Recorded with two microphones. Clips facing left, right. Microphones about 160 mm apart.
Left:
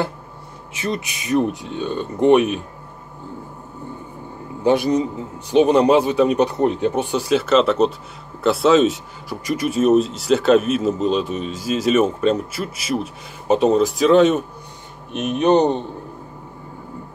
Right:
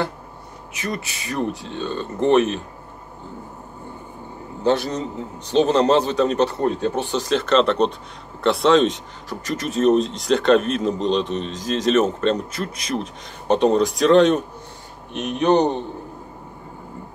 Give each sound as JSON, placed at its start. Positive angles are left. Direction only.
{"t": 0.7, "sound": "speech", "side_deg": 25}
{"t": 4.6, "sound": "speech", "side_deg": 10}
{"t": 15.1, "sound": "speech", "side_deg": 20}